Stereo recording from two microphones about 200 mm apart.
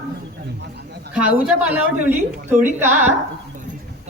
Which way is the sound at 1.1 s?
5° right (ahead or behind).